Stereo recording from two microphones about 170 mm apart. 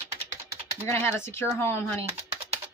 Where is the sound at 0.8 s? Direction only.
15° left (ahead or behind).